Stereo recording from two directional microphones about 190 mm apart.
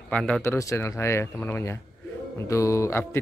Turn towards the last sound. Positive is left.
turn(degrees=15)  # may be behind; listen again after turning